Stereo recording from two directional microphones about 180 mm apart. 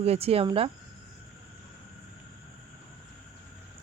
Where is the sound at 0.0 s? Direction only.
35° right (ahead or behind).